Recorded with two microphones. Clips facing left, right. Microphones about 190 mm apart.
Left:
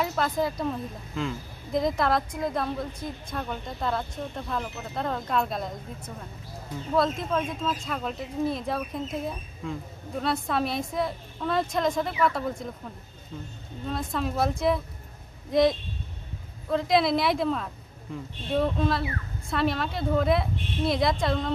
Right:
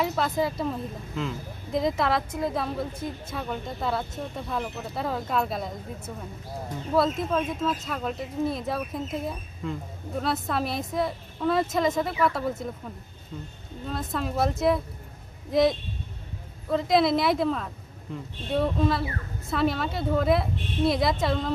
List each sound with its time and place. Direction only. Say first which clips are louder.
0.0 s speech: right 1 dB; centre (ahead or behind)
13.8 s speech: left 1 dB; centre (ahead or behind)